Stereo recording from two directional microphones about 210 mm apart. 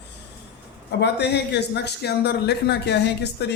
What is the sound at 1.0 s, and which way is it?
A man's voice, 55° left (ahead or behind).